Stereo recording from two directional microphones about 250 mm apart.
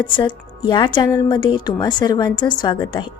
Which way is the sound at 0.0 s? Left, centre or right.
Centre.